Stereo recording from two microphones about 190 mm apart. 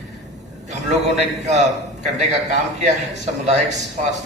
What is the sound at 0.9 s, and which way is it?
A man's voice, 35° right (ahead or behind).